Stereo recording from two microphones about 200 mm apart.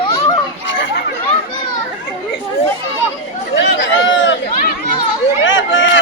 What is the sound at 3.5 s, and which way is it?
Chatter, 65° left (ahead or behind).